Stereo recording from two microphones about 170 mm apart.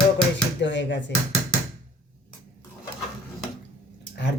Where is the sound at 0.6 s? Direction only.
90° left.